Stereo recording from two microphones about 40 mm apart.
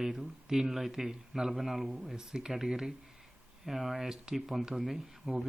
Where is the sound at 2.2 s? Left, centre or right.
Centre.